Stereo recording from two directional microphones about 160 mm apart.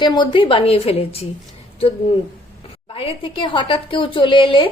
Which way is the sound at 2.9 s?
35° left (ahead or behind).